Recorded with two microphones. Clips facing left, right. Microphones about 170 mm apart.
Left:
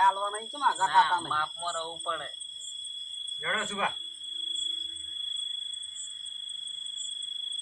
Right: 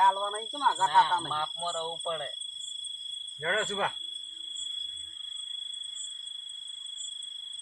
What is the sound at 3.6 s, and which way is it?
Speech, 35° right (ahead or behind).